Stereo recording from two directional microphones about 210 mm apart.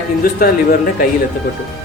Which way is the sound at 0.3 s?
45° left (ahead or behind).